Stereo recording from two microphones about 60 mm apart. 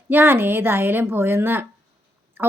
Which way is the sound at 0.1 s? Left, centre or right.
Right.